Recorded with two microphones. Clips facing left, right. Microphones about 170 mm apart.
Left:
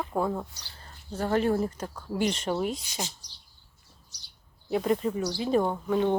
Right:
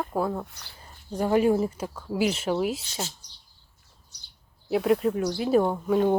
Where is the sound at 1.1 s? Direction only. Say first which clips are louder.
Right 4 dB; 15° right (ahead or behind).